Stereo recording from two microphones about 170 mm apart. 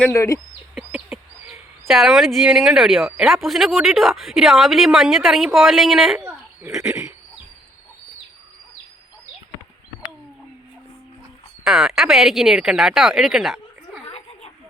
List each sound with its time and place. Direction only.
0.0 s speech: 15° left (ahead or behind)
0.8 s a sound: 5° right (ahead or behind)
3.1 s a woman's voice: 5° right (ahead or behind)
6.2 s a sound: 15° right (ahead or behind)
6.7 s a woman's voice: 5° right (ahead or behind)
11.6 s speech: 5° right (ahead or behind)